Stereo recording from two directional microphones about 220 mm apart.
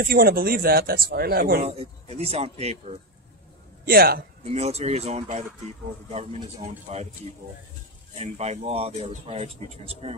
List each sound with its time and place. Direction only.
0.0 s speech: 45° right (ahead or behind)
1.6 s speech: 30° right (ahead or behind)
3.8 s speech: 45° right (ahead or behind)
4.5 s speech: 30° right (ahead or behind)
6.9 s speech: 30° right (ahead or behind)
8.2 s speech: 30° right (ahead or behind)